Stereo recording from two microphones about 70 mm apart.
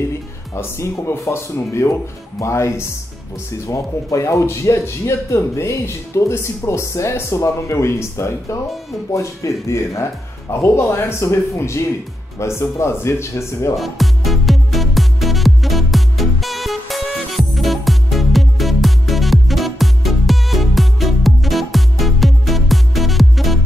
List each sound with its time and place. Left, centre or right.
0.6 s speech: left
13.7 s music: centre